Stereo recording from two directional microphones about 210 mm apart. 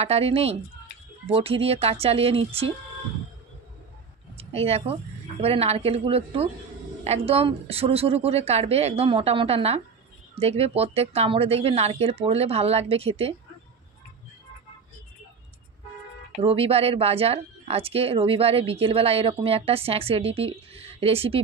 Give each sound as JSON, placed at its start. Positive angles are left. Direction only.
{"t": 0.0, "sound": "speech", "side_deg": -30}
{"t": 4.4, "sound": "speech", "side_deg": -30}
{"t": 16.3, "sound": "speech", "side_deg": -25}